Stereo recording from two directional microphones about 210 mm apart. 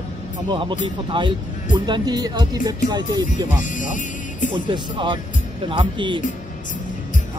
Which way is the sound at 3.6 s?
40° left (ahead or behind).